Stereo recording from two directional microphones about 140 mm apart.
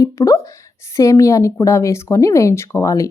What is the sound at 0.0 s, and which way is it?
Speech, 25° left (ahead or behind).